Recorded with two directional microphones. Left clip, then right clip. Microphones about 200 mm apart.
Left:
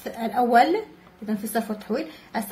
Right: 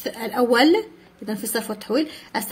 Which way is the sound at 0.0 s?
45° right (ahead or behind).